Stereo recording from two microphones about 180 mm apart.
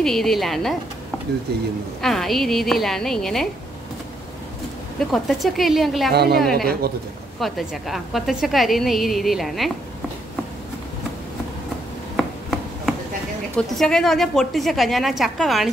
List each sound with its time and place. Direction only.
0.0 s a woman's voice: centre (ahead or behind)
1.5 s a woman's voice: 60° right (ahead or behind)
2.0 s a woman's voice: centre (ahead or behind)
5.1 s a woman's voice: centre (ahead or behind)
6.1 s a woman's voice: 60° right (ahead or behind)
6.4 s a woman's voice: centre (ahead or behind)
12.2 s a sound: centre (ahead or behind)
13.6 s a woman's voice: 5° left (ahead or behind)